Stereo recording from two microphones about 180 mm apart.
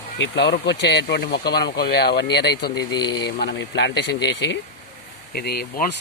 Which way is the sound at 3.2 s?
70° left (ahead or behind).